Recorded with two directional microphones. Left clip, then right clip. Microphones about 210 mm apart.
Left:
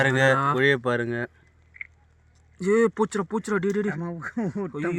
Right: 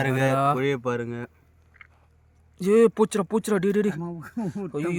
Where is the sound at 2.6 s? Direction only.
35° right (ahead or behind).